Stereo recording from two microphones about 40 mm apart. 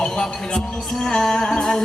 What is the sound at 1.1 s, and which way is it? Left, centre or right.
Music, centre.